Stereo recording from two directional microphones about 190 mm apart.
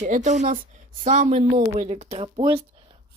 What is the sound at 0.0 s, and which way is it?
A woman's voice, 40° right (ahead or behind).